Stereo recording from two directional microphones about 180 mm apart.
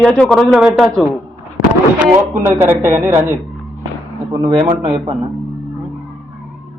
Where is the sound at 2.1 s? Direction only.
15° right (ahead or behind).